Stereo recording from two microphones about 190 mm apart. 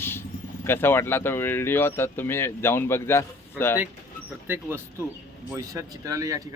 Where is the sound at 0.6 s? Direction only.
10° left (ahead or behind).